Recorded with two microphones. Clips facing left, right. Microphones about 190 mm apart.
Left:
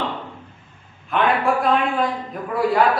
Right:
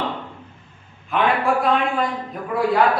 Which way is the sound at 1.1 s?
Centre (ahead or behind).